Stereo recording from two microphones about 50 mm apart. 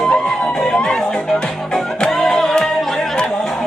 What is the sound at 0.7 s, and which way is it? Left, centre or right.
Music, centre.